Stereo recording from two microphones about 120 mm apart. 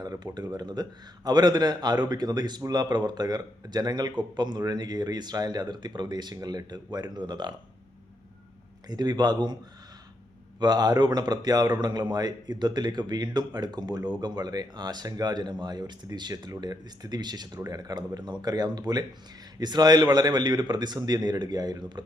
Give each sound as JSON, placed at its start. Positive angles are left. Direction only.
{"t": 0.0, "sound": "a sound", "side_deg": -35}
{"t": 0.3, "sound": "a man's voice", "side_deg": -35}
{"t": 8.9, "sound": "a man's voice", "side_deg": -35}
{"t": 10.6, "sound": "a man's voice", "side_deg": -35}